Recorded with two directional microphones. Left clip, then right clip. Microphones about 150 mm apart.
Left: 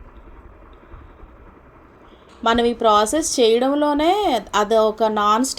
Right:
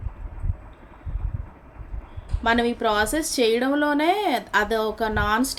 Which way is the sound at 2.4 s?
20° left (ahead or behind).